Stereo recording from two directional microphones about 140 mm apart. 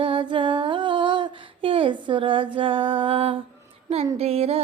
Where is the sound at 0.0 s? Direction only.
35° right (ahead or behind).